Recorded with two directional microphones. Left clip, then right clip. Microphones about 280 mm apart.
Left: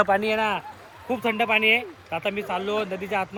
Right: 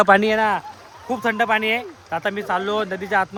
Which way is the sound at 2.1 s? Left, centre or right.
Right.